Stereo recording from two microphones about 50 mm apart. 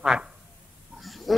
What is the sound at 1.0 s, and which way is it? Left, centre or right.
Pig, centre.